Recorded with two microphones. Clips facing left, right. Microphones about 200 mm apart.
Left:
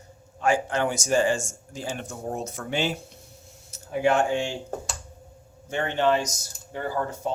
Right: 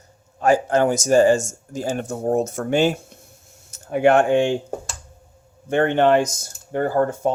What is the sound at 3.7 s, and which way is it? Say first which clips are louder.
Speech: right 7 dB; 60° right (ahead or behind).